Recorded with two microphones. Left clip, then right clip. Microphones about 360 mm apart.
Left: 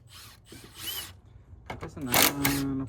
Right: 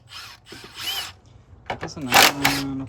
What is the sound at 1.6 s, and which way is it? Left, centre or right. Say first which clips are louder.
Speech: right 8 dB; centre.